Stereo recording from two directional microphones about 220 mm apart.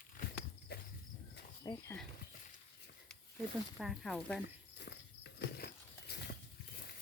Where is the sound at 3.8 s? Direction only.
Centre (ahead or behind).